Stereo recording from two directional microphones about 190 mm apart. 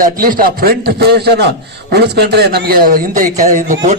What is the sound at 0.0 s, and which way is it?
A man's voice, 45° right (ahead or behind).